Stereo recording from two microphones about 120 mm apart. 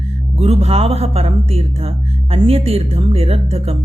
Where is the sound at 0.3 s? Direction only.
60° right (ahead or behind).